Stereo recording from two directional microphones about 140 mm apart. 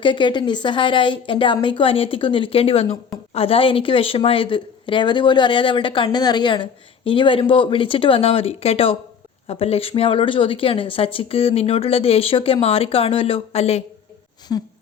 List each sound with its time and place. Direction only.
0.0 s a woman's voice: 35° left (ahead or behind)
14.5 s a woman's voice: 25° left (ahead or behind)